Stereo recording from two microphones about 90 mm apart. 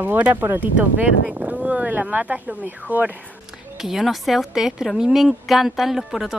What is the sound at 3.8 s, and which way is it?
Speech, centre (ahead or behind).